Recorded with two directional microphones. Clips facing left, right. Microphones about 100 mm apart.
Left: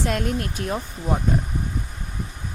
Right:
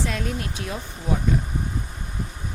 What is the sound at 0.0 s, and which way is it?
Speech, 50° left (ahead or behind).